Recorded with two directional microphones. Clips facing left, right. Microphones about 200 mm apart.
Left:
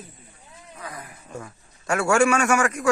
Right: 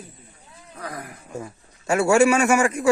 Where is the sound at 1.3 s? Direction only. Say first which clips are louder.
Right 3 dB; 25° right (ahead or behind).